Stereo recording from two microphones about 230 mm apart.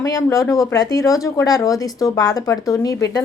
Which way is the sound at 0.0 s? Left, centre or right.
Centre.